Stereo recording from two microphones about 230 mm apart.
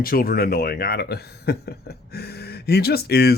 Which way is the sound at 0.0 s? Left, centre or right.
Left.